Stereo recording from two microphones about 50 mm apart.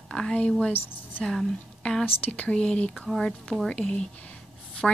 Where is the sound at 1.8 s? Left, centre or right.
Centre.